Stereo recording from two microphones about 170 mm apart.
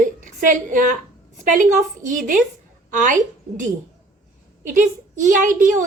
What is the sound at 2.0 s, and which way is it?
Speech, 50° right (ahead or behind).